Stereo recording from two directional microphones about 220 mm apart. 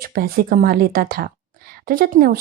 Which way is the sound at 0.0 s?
40° right (ahead or behind).